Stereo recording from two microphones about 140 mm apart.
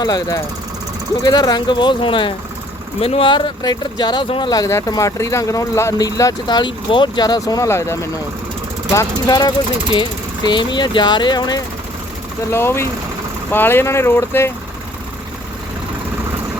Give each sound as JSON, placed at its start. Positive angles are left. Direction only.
{"t": 0.0, "sound": "speech", "side_deg": 25}
{"t": 9.2, "sound": "speech", "side_deg": 30}
{"t": 12.5, "sound": "speech", "side_deg": 15}